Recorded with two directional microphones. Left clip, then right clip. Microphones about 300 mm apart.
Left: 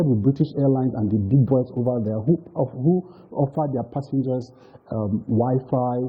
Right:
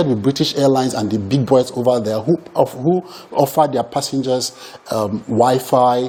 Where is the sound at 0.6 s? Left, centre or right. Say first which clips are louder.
Right 9 dB; centre.